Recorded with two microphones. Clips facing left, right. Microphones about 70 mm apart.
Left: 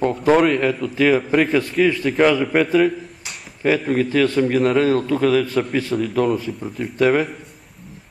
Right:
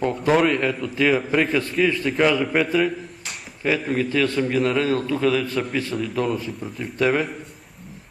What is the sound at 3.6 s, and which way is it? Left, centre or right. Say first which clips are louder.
A man's voice: left 4 dB; left.